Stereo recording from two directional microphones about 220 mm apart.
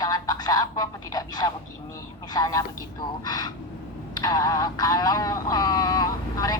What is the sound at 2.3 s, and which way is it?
Speech, 15° left (ahead or behind).